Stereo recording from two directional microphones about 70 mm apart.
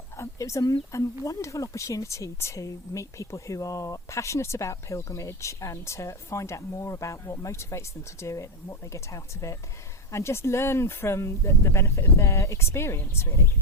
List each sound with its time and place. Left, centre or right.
0.2 s speech: left